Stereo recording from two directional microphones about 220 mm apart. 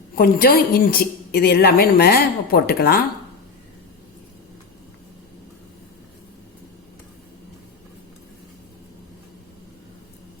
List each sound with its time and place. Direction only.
0.2 s a woman's voice: 40° left (ahead or behind)